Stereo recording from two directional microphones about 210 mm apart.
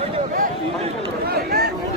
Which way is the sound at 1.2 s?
50° right (ahead or behind).